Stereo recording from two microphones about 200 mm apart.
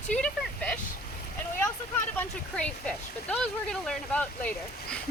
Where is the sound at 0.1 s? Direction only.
5° left (ahead or behind).